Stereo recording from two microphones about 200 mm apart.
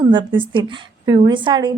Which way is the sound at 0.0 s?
25° right (ahead or behind).